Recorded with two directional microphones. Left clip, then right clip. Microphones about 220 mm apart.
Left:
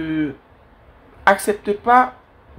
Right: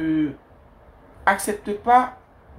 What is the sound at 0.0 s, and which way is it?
Speech, 45° left (ahead or behind).